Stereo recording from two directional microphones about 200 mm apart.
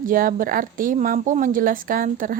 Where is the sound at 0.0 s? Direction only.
45° right (ahead or behind).